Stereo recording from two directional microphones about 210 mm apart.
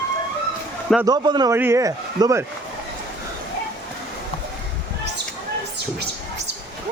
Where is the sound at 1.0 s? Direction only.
20° right (ahead or behind).